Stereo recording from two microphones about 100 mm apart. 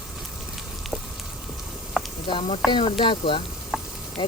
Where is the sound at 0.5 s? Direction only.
Centre (ahead or behind).